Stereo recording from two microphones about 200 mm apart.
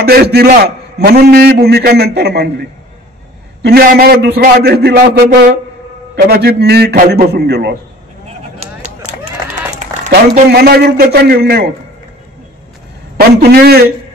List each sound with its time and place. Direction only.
0.0 s a man's voice: 50° right (ahead or behind)
3.6 s a man's voice: 50° right (ahead or behind)
10.0 s speech: 35° right (ahead or behind)
10.5 s a man's voice: 50° right (ahead or behind)
13.4 s a man's voice: 50° right (ahead or behind)